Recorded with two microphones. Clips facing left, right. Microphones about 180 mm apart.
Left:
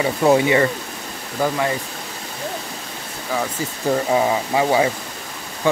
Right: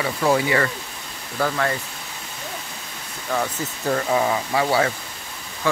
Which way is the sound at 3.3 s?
10° left (ahead or behind).